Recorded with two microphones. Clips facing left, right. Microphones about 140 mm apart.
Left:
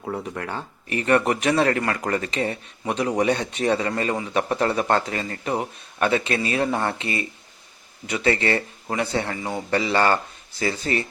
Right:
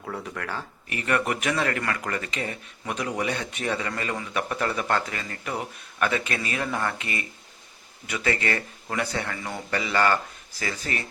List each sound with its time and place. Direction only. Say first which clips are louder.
0.2 s speech: left 3 dB; 25° left (ahead or behind)